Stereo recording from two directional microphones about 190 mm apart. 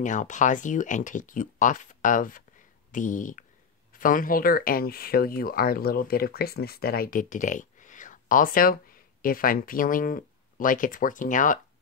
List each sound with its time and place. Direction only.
0.0 s speech: 40° left (ahead or behind)